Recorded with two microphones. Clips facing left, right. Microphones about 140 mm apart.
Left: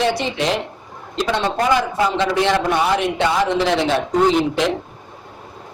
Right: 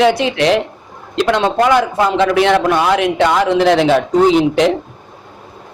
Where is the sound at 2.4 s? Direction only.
65° right (ahead or behind); by 3.0 s 85° right.